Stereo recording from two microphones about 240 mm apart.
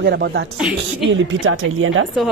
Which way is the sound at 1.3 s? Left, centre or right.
Right.